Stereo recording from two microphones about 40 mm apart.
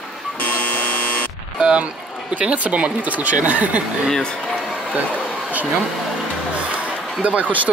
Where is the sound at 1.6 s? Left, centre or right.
Right.